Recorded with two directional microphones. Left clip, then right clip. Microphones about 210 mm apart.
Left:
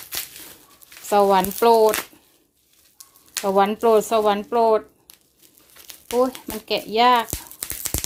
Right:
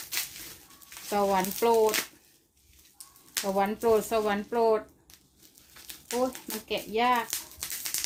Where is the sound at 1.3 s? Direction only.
35° left (ahead or behind).